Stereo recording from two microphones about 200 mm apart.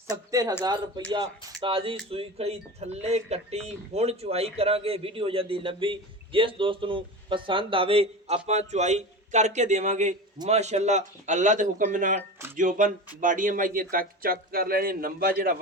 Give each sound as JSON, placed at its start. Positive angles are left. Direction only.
{"t": 0.1, "sound": "speech", "side_deg": -20}